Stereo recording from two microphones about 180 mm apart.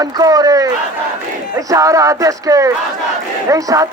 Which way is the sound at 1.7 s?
20° right (ahead or behind).